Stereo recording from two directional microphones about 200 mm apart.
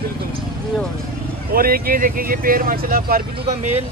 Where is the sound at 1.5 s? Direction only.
45° right (ahead or behind).